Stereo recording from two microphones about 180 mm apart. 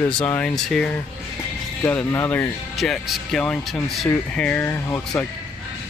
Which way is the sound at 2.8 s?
Centre (ahead or behind).